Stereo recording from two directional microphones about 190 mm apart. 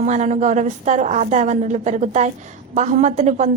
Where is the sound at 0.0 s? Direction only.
40° right (ahead or behind).